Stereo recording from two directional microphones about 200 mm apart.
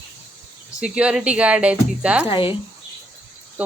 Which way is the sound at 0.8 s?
5° right (ahead or behind).